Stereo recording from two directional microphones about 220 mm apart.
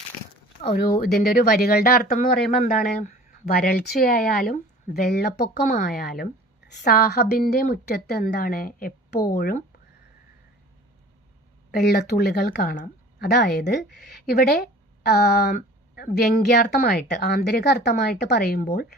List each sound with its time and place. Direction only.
0.7 s speech: 45° left (ahead or behind)
11.7 s speech: 45° left (ahead or behind)